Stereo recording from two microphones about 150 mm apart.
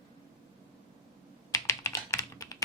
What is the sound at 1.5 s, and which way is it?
Computer keyboard, 20° left (ahead or behind).